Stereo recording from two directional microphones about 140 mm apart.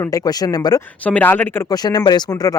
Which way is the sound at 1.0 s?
10° left (ahead or behind).